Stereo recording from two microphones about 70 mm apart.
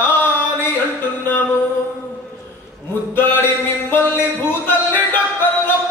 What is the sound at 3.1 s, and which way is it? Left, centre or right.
Music, left.